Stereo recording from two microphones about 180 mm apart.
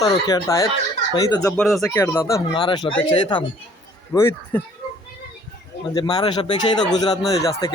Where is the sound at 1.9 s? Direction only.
15° left (ahead or behind).